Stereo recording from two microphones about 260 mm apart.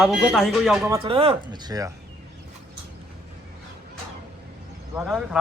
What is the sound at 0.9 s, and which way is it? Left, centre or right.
Speech, right.